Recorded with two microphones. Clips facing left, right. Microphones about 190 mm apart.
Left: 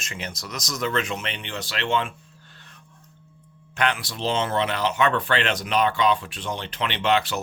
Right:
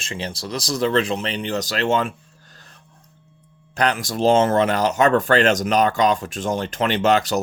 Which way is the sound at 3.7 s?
40° right (ahead or behind).